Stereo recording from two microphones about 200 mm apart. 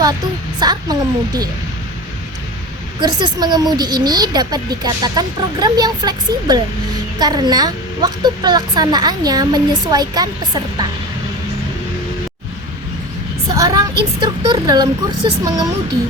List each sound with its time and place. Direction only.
0.6 s a woman's voice: 20° right (ahead or behind)
3.0 s a woman's voice: 20° right (ahead or behind)
13.5 s a woman's voice: 20° right (ahead or behind)